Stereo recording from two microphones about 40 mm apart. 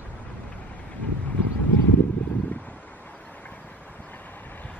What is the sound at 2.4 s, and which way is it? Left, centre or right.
Vehicle, left.